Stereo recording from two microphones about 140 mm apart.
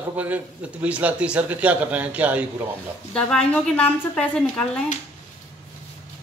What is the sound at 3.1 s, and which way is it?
A woman's voice, 5° left (ahead or behind).